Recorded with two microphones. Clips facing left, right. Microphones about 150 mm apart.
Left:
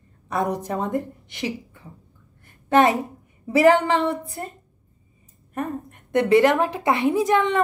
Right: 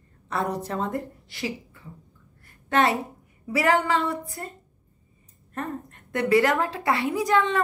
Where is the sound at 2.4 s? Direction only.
20° left (ahead or behind).